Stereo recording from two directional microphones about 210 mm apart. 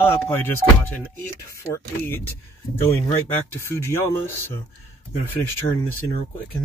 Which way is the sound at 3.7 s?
10° left (ahead or behind).